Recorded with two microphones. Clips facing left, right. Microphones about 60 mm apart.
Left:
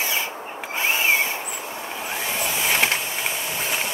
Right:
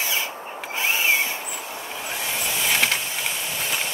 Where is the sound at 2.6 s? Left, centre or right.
Centre.